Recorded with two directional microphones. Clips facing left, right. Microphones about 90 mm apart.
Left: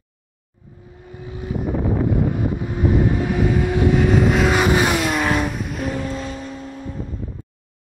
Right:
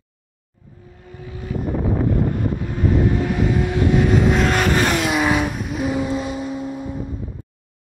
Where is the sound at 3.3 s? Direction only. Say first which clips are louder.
Left 1 dB; 5° left (ahead or behind); by 7.0 s 15° right (ahead or behind).